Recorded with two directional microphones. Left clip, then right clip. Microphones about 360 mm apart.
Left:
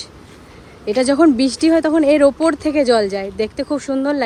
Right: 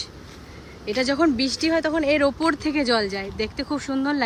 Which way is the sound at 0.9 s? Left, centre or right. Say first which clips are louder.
Left 8 dB; centre.